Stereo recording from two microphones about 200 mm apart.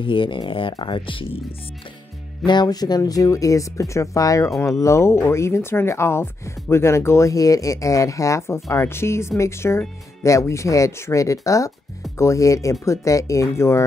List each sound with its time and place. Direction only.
0.0 s speech: 25° left (ahead or behind)
2.4 s speech: 20° left (ahead or behind)